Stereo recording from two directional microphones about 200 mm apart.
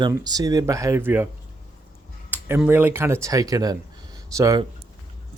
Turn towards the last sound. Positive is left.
turn(degrees=-15)  # may be behind; listen again after turning